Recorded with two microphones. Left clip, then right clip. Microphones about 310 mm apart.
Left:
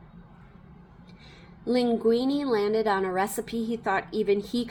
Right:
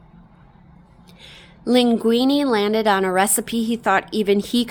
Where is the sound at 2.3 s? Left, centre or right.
Centre.